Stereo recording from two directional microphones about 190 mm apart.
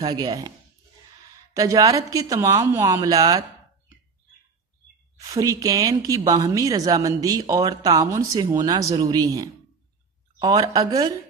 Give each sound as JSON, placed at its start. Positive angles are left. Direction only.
{"t": 0.0, "sound": "speech", "side_deg": -20}
{"t": 1.5, "sound": "speech", "side_deg": -20}
{"t": 5.2, "sound": "speech", "side_deg": -20}